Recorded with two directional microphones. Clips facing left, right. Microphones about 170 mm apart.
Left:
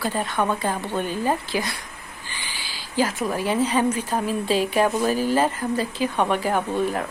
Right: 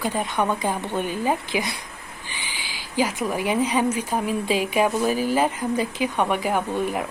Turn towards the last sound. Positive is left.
turn(degrees=-15)  # may be behind; listen again after turning